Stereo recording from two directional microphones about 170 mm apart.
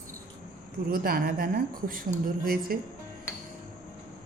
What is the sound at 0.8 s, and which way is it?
Speech, 55° right (ahead or behind).